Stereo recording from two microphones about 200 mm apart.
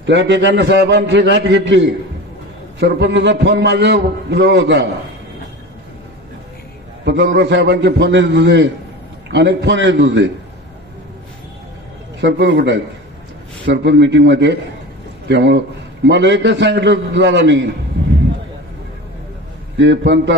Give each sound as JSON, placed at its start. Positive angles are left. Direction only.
{"t": 0.0, "sound": "a man's voice", "side_deg": -65}
{"t": 7.3, "sound": "a man's voice", "side_deg": -60}
{"t": 12.2, "sound": "a man's voice", "side_deg": -60}
{"t": 19.8, "sound": "a man's voice", "side_deg": -65}